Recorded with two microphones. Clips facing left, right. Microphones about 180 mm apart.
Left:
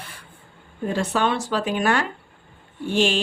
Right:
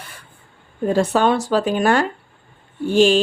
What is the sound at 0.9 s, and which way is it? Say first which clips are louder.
Speech: right 6 dB; 40° right (ahead or behind).